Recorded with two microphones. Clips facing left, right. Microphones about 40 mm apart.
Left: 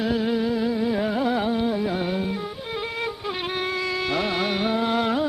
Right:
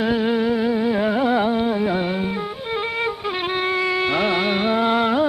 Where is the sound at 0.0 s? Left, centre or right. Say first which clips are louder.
Right 4 dB; right.